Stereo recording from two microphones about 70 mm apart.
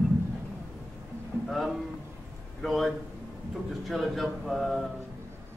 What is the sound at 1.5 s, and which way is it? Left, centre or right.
A man's voice, centre.